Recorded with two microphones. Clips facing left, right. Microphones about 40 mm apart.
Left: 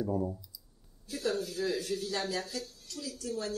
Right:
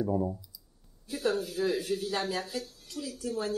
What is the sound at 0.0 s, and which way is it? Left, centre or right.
Speech, centre.